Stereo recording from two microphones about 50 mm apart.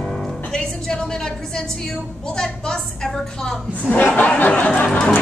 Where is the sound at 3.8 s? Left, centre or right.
Left.